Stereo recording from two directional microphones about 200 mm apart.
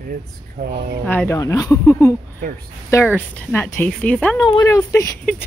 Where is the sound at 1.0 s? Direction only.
10° left (ahead or behind).